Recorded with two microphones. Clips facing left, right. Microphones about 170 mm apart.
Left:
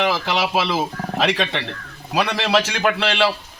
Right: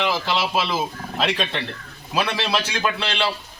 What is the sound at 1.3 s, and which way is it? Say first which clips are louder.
Speech: left 3 dB; 70° left (ahead or behind).